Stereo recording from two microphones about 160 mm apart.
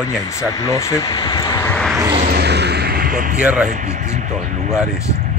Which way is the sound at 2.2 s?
90° right.